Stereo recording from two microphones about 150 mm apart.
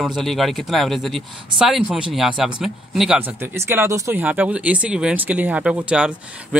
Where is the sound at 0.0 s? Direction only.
Centre (ahead or behind).